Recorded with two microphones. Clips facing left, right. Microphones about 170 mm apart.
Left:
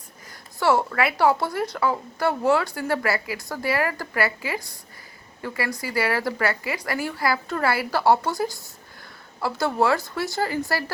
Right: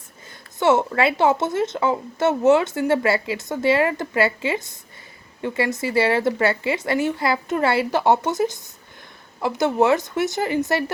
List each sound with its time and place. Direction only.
0.6 s speech: 20° right (ahead or behind)